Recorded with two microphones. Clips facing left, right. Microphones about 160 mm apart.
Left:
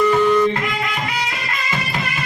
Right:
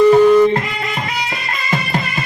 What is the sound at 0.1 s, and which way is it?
Music, 35° right (ahead or behind).